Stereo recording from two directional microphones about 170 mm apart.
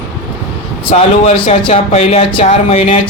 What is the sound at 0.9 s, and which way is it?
Speech, 40° left (ahead or behind).